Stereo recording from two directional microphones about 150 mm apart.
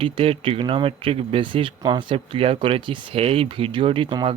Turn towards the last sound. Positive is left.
turn(degrees=-35)  # may be behind; listen again after turning